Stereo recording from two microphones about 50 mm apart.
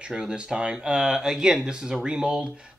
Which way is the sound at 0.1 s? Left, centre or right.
Centre.